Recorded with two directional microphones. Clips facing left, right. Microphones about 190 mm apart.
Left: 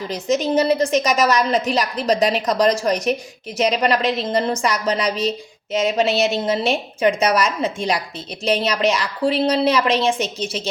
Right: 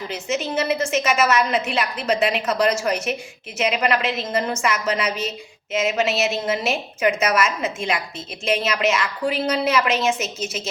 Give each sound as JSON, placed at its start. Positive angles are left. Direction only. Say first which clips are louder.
{"t": 0.1, "sound": "a woman's voice", "louder": "left 7 dB", "side_deg": 35}